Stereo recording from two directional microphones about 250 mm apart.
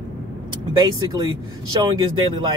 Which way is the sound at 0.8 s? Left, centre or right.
Centre.